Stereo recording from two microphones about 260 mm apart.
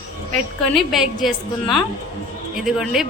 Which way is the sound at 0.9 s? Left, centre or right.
Centre.